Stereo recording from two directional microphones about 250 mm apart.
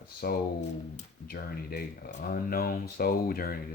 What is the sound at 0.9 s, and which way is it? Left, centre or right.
Speech, left.